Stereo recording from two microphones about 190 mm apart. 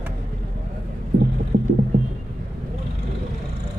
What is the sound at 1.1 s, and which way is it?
Hum, 45° right (ahead or behind).